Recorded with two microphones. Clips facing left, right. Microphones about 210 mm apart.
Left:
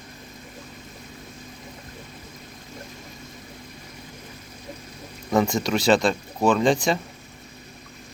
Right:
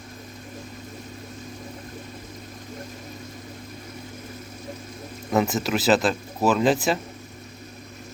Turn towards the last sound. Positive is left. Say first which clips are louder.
# even
turn(degrees=-5)  # may be behind; listen again after turning